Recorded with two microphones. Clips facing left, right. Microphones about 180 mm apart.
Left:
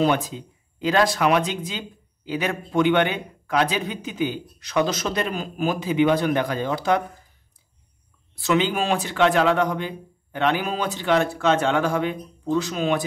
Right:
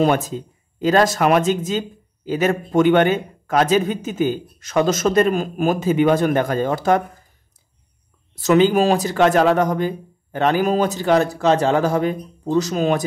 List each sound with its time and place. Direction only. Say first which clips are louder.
0.0 s speech: right 3 dB; 45° right (ahead or behind)
8.4 s speech: right 7 dB; 45° right (ahead or behind)